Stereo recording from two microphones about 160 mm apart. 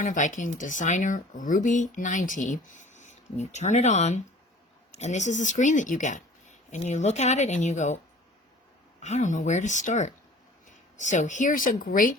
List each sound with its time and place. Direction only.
0.0 s speech: 55° left (ahead or behind)
9.0 s speech: 45° left (ahead or behind)